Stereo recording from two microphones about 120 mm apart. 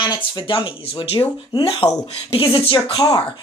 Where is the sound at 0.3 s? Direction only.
45° left (ahead or behind).